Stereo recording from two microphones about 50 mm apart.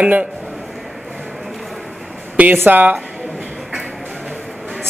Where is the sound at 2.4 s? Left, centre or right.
Right.